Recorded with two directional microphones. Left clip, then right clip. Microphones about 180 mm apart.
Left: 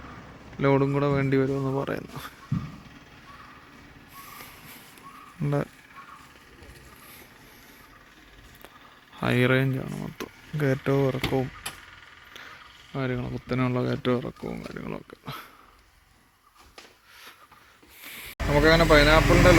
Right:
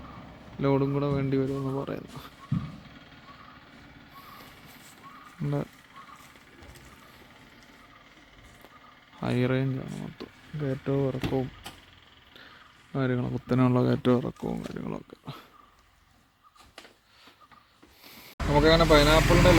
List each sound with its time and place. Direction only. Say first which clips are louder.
0.6 s speech: left 4 dB; centre (ahead or behind)
5.4 s a sound: left 4 dB; centre (ahead or behind)
9.2 s speech: left 5 dB; centre (ahead or behind)
10.0 s speech: left 5 dB; 15° left (ahead or behind)
12.9 s speech: right 1 dB; 30° right (ahead or behind)
15.2 s speech: left 6 dB; centre (ahead or behind)
18.0 s a sound: left 3 dB; centre (ahead or behind)